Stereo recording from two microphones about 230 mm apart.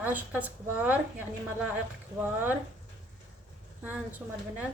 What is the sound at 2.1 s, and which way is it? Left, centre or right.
Speech, centre.